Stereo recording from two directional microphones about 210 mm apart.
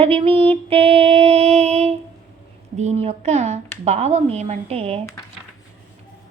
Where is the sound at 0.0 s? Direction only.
25° right (ahead or behind).